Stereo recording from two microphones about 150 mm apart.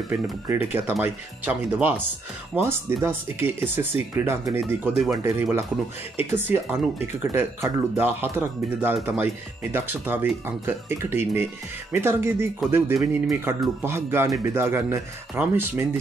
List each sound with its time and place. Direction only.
0.1 s speech: 15° right (ahead or behind)